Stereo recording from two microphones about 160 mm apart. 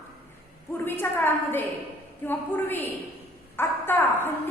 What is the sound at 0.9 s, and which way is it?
A woman's voice, 15° left (ahead or behind).